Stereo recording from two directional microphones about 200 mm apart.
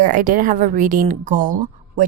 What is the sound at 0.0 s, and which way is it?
A woman's voice, 40° right (ahead or behind).